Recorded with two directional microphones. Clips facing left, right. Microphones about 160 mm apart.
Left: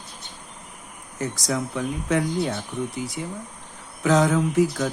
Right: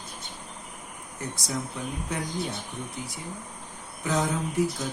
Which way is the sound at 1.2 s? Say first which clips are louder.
Left 7 dB; 90° left.